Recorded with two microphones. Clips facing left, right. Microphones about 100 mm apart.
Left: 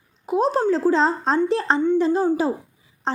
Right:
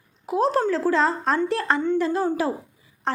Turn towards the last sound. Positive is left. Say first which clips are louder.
# left 1 dB
turn(degrees=20)  # may be behind; listen again after turning